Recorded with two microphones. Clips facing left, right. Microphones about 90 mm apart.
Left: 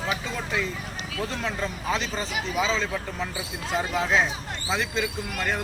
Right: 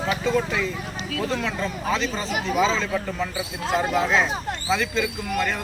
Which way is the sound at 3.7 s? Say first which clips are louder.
Right 5 dB; 50° right (ahead or behind).